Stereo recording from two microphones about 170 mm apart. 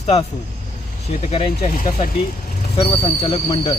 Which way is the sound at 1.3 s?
30° left (ahead or behind).